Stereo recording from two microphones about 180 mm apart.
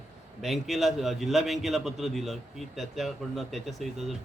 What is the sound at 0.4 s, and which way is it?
A man's voice, centre (ahead or behind).